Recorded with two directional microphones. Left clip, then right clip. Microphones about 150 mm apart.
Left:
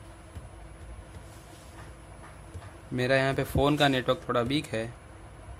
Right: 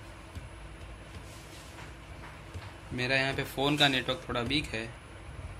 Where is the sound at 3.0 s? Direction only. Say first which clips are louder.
Left 4 dB; 65° left (ahead or behind).